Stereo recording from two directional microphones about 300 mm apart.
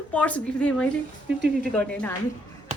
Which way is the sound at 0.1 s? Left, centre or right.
Centre.